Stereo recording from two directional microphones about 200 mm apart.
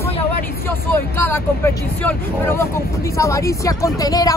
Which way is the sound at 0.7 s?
10° left (ahead or behind).